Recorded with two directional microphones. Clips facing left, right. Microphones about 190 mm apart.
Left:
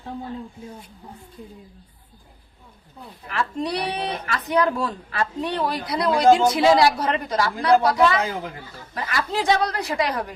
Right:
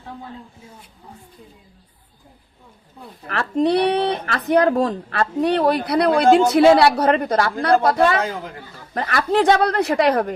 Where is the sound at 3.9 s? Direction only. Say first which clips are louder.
Right 7 dB; 55° right (ahead or behind).